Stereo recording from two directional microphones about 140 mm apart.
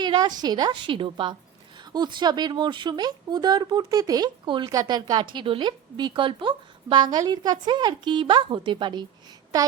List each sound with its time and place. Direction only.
0.0 s speech: 30° right (ahead or behind)